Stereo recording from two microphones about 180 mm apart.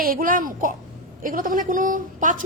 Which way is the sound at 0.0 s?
55° right (ahead or behind).